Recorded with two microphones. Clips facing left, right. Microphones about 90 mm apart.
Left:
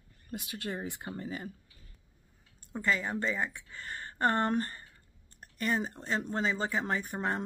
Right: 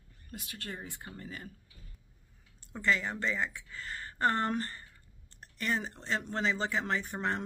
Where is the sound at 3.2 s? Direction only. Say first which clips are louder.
Left 1 dB; 30° left (ahead or behind).